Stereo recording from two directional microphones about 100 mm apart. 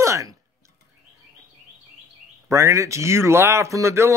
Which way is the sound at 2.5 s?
30° right (ahead or behind).